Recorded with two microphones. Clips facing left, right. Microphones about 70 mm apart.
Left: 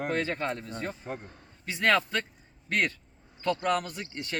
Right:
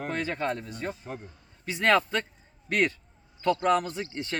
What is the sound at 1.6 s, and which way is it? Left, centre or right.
A man's voice, centre.